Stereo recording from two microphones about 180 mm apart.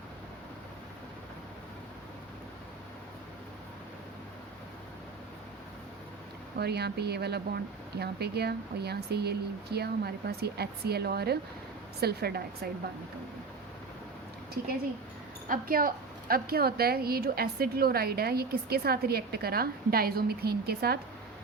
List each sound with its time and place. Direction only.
6.6 s a woman's voice: 65° right (ahead or behind)
15.4 s a woman's voice: 55° right (ahead or behind)